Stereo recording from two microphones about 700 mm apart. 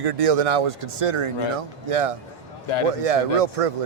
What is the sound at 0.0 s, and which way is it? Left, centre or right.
Speech, right.